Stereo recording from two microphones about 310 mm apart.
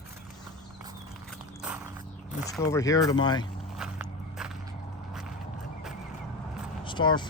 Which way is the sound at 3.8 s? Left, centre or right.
Centre.